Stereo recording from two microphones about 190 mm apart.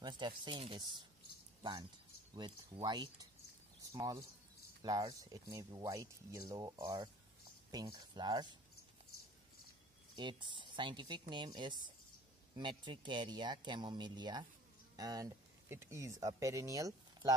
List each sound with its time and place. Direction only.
0.5 s speech: 30° right (ahead or behind)
10.1 s speech: 25° right (ahead or behind)